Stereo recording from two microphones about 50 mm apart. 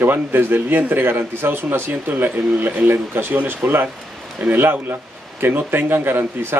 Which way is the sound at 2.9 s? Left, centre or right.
Right.